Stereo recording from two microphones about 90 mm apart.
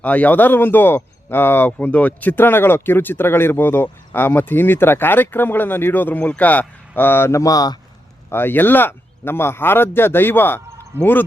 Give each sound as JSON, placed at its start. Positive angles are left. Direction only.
{"t": 0.0, "sound": "speech", "side_deg": 15}
{"t": 8.3, "sound": "speech", "side_deg": 25}